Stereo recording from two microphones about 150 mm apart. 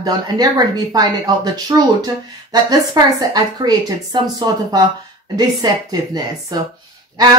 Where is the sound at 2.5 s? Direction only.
25° right (ahead or behind).